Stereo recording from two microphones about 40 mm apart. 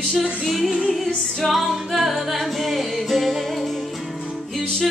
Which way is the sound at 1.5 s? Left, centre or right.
Centre.